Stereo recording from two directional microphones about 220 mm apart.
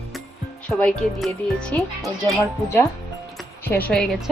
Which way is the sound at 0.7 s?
5° left (ahead or behind).